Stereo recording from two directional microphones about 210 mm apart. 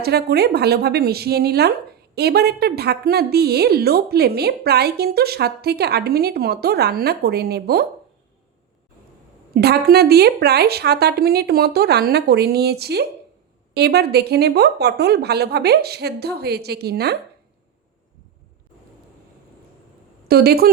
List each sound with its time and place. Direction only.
0.0 s speech: 50° right (ahead or behind)
9.6 s speech: 50° right (ahead or behind)
20.2 s a woman's voice: 50° right (ahead or behind)